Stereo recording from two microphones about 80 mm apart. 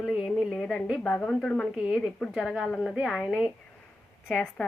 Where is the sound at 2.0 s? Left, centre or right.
Centre.